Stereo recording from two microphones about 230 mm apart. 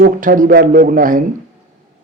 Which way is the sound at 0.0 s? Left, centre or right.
Right.